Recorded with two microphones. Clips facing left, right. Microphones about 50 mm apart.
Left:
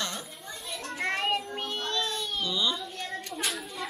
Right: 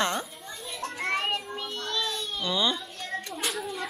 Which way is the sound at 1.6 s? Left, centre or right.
Left.